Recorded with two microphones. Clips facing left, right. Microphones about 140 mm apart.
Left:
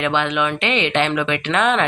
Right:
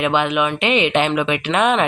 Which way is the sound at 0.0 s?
10° right (ahead or behind).